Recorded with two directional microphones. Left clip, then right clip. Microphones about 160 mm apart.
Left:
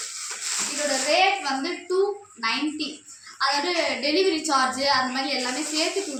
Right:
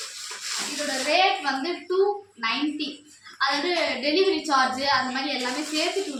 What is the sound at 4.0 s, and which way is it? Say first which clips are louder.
A woman's voice: even; centre (ahead or behind).